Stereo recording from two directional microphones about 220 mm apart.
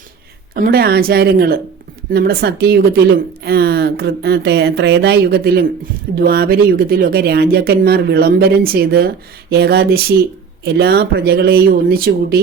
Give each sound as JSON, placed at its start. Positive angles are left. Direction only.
{"t": 0.5, "sound": "speech", "side_deg": -45}